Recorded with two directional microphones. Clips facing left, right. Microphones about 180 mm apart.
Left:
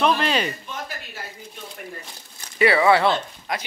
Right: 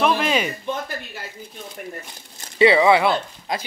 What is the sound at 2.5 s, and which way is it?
Speech, 20° right (ahead or behind).